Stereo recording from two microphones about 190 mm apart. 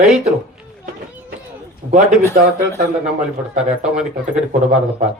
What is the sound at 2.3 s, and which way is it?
Speech, 55° right (ahead or behind).